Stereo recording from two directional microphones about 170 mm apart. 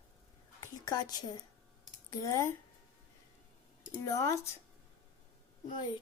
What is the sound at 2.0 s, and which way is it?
Speech, 15° left (ahead or behind).